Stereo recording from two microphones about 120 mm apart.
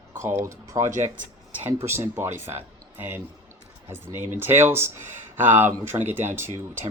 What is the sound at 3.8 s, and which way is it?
Speech, 20° right (ahead or behind).